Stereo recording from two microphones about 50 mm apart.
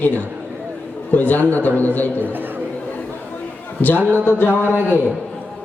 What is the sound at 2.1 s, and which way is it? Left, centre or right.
Speech, right.